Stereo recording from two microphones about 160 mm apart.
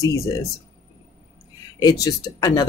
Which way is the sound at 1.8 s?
20° left (ahead or behind).